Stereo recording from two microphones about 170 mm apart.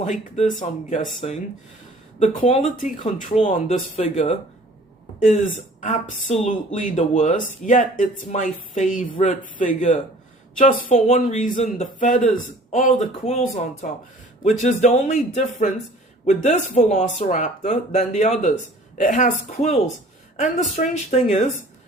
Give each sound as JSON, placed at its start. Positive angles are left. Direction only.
{"t": 0.0, "sound": "a woman's voice", "side_deg": 45}
{"t": 2.1, "sound": "a woman's voice", "side_deg": 40}
{"t": 3.3, "sound": "a woman's voice", "side_deg": 35}